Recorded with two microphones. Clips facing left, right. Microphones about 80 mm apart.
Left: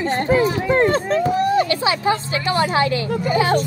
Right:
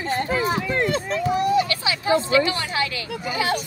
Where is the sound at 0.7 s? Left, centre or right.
Left.